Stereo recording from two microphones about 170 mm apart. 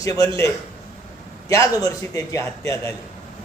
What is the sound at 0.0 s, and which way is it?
A man's voice, 20° left (ahead or behind).